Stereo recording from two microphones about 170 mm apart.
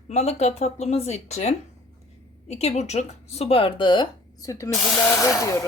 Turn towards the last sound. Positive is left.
turn(degrees=15)  # may be behind; listen again after turning